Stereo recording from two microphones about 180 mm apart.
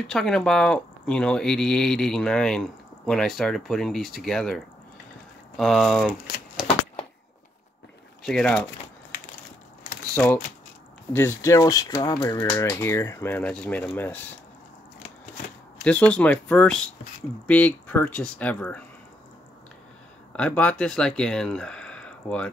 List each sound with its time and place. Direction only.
0.1 s speech: 5° left (ahead or behind)
5.6 s speech: centre (ahead or behind)
8.2 s speech: 5° left (ahead or behind)
10.1 s speech: 10° left (ahead or behind)
15.8 s speech: 5° left (ahead or behind)
20.3 s speech: 5° left (ahead or behind)